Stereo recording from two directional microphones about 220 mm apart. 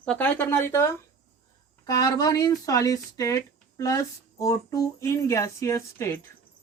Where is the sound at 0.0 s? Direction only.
5° left (ahead or behind).